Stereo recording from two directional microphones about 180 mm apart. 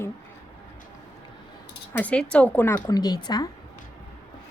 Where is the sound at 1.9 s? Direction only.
5° left (ahead or behind).